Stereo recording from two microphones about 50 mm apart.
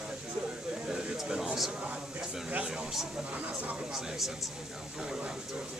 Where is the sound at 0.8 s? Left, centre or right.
Centre.